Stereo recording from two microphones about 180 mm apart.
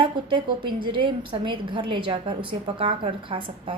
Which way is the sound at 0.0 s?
25° right (ahead or behind).